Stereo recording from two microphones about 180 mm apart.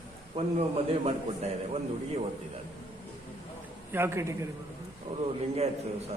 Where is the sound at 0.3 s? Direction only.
35° right (ahead or behind).